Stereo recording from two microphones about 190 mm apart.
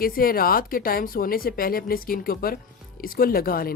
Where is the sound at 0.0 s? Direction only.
50° left (ahead or behind).